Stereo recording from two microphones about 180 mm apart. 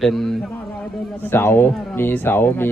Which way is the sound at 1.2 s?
10° left (ahead or behind).